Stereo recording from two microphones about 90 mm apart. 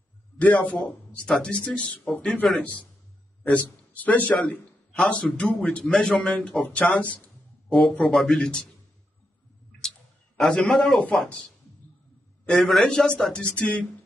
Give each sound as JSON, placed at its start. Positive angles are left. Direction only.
{"t": 0.4, "sound": "a man's voice", "side_deg": 15}
{"t": 3.4, "sound": "a man's voice", "side_deg": 20}
{"t": 8.0, "sound": "speech", "side_deg": 5}
{"t": 9.8, "sound": "a sound", "side_deg": 5}
{"t": 12.4, "sound": "a man's voice", "side_deg": 0}